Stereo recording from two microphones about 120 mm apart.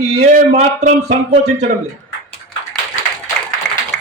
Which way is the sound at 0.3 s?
75° right (ahead or behind).